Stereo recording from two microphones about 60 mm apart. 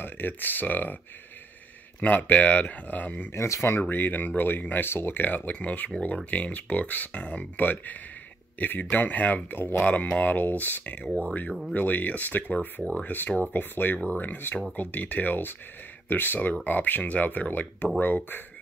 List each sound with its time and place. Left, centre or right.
0.0 s speech: left
2.0 s speech: left
3.3 s speech: left
3.9 s speech: left
5.5 s speech: left